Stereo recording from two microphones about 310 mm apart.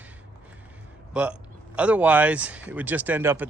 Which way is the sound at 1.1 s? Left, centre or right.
Centre.